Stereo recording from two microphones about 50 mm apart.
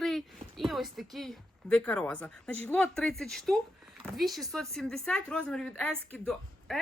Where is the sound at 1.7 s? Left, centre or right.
Left.